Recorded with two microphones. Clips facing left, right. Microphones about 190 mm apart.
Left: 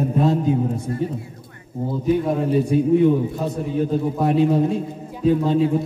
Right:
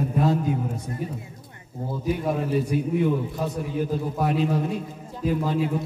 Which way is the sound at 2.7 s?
25° left (ahead or behind).